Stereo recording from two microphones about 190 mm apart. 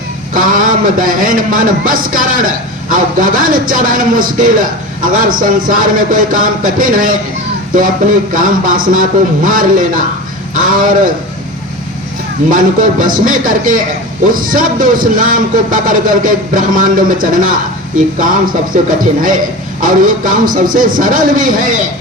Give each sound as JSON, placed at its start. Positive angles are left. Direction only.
{"t": 0.3, "sound": "a sound", "side_deg": -45}
{"t": 0.7, "sound": "a man's voice", "side_deg": -45}
{"t": 12.5, "sound": "a man's voice", "side_deg": -45}